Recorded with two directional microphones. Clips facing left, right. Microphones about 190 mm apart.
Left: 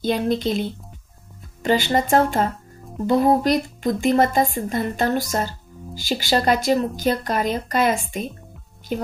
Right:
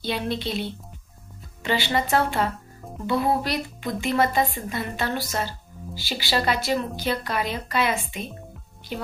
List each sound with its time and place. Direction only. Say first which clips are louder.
0.0 s speech: left 7 dB; 45° left (ahead or behind)